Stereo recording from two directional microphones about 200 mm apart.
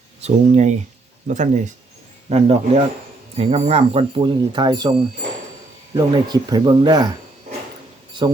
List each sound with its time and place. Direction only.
0.2 s speech: 35° right (ahead or behind)
5.9 s speech: 20° right (ahead or behind)